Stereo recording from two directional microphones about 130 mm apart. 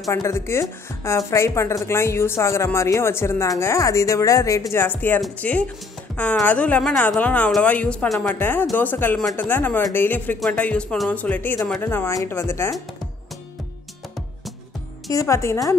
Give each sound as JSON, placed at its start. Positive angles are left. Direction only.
{"t": 0.1, "sound": "speech", "side_deg": 20}
{"t": 15.0, "sound": "speech", "side_deg": 25}